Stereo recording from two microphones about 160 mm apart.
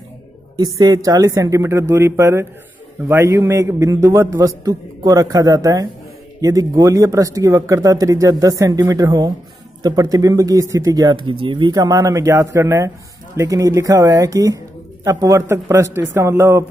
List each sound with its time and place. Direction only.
0.7 s a man's voice: 20° right (ahead or behind)